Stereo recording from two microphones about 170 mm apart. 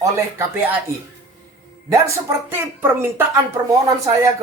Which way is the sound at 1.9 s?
15° right (ahead or behind).